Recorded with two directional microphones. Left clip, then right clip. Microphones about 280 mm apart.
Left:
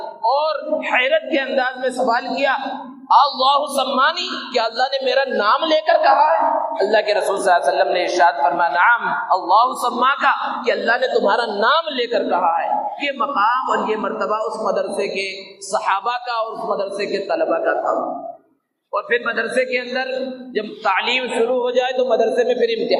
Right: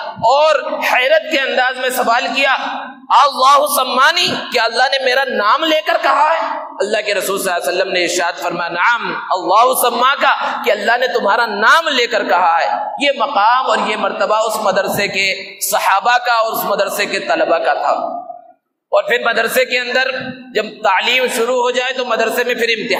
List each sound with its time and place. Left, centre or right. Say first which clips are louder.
0.3 s a man's voice: right 7 dB; right
18.9 s a man's voice: right 6 dB; right